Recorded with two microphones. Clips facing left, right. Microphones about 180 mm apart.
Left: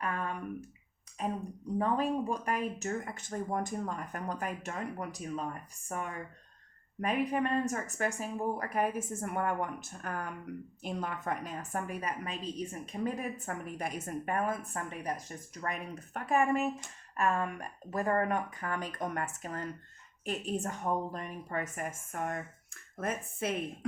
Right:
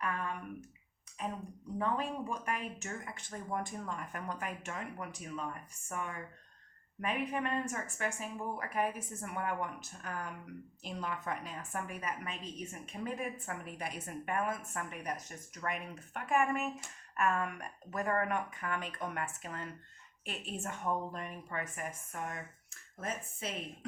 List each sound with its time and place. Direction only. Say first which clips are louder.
1.8 s a woman's voice: left 5 dB; 35° left (ahead or behind); by 23.6 s 55° left (ahead or behind)